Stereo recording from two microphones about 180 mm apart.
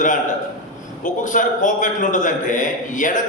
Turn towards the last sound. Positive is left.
turn(degrees=45)  # may be behind; listen again after turning